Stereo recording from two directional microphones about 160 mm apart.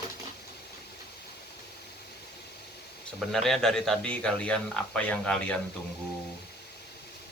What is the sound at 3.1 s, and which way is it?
Speech, centre (ahead or behind).